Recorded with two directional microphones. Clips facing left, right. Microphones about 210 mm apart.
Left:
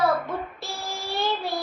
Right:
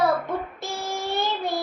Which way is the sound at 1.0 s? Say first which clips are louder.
Even; 20° right (ahead or behind).